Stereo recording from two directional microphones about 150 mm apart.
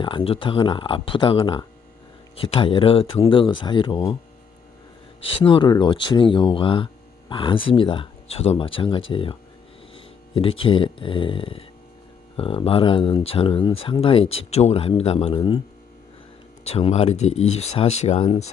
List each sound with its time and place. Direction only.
0.0 s speech: 35° left (ahead or behind)
5.2 s speech: 35° left (ahead or behind)
15.4 s speech: 25° left (ahead or behind)
16.6 s speech: 40° left (ahead or behind)